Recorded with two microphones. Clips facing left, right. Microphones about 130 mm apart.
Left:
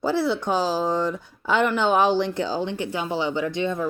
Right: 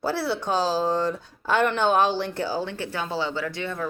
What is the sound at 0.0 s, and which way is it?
Speech, 15° left (ahead or behind).